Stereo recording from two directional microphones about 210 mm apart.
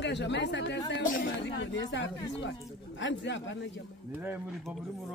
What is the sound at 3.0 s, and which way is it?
Speech, 60° left (ahead or behind).